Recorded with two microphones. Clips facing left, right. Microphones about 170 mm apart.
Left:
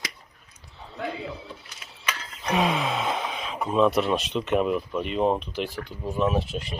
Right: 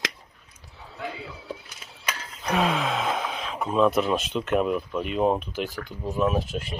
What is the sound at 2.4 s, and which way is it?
Speech, 5° left (ahead or behind).